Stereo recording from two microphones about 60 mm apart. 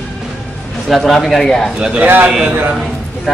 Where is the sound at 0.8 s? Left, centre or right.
Centre.